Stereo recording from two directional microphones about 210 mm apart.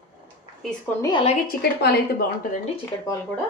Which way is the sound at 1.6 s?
45° left (ahead or behind).